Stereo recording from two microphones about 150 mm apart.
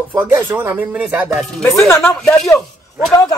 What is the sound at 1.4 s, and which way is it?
Speech, 5° left (ahead or behind).